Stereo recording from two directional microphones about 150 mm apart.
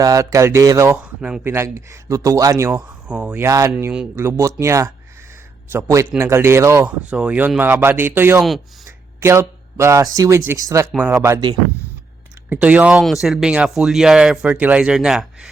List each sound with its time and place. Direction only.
0.0 s speech: 25° right (ahead or behind)
0.9 s speech: 5° right (ahead or behind); by 2.8 s 20° right (ahead or behind)
3.1 s speech: 10° right (ahead or behind)
7.1 s speech: 10° right (ahead or behind)
8.4 s speech: centre (ahead or behind)
9.2 s speech: 15° right (ahead or behind)
12.5 s speech: 10° right (ahead or behind)